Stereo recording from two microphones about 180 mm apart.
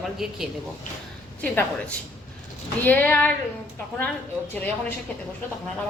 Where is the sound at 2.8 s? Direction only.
10° left (ahead or behind).